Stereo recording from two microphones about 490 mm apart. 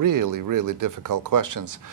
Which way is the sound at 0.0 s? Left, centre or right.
Right.